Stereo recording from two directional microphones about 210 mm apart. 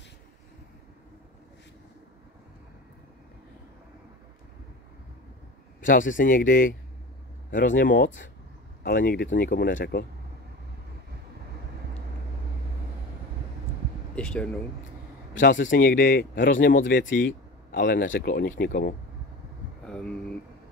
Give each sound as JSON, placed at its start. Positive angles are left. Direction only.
{"t": 5.8, "sound": "a man's voice", "side_deg": 40}
{"t": 14.1, "sound": "speech", "side_deg": 5}
{"t": 15.5, "sound": "speech", "side_deg": 60}
{"t": 15.8, "sound": "a man's voice", "side_deg": 45}
{"t": 19.8, "sound": "a sound", "side_deg": 5}